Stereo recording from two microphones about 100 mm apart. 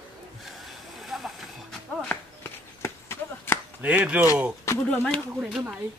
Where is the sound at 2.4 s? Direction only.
25° left (ahead or behind).